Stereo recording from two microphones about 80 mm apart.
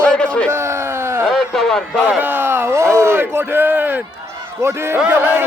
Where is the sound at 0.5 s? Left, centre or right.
Right.